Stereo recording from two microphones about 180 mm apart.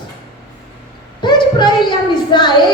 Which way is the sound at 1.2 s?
25° left (ahead or behind).